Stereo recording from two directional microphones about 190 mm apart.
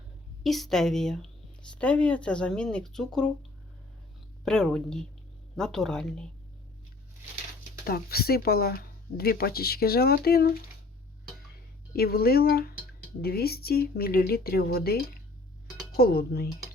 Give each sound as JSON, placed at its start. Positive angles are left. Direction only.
{"t": 0.4, "sound": "speech", "side_deg": 0}
{"t": 4.4, "sound": "speech", "side_deg": 5}
{"t": 7.9, "sound": "speech", "side_deg": 55}
{"t": 11.9, "sound": "speech", "side_deg": 55}